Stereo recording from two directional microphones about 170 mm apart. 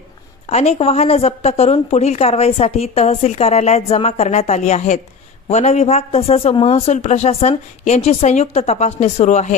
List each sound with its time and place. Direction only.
0.5 s a woman's voice: 40° left (ahead or behind)